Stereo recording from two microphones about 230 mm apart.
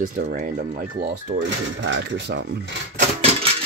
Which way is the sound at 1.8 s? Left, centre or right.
Right.